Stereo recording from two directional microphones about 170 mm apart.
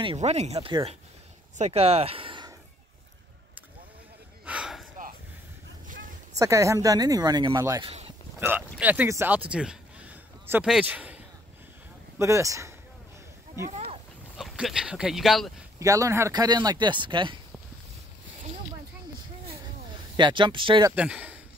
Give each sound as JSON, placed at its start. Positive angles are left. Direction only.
{"t": 0.2, "sound": "speech", "side_deg": -40}
{"t": 4.5, "sound": "a sound", "side_deg": -5}
{"t": 5.9, "sound": "a sound", "side_deg": -50}
{"t": 6.3, "sound": "speech", "side_deg": -20}
{"t": 12.2, "sound": "a man's voice", "side_deg": -15}
{"t": 14.4, "sound": "speech", "side_deg": 0}
{"t": 15.8, "sound": "speech", "side_deg": -20}
{"t": 20.2, "sound": "speech", "side_deg": -30}
{"t": 20.9, "sound": "a man's voice", "side_deg": -5}